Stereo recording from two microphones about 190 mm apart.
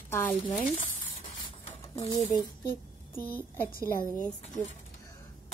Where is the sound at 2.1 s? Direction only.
15° left (ahead or behind).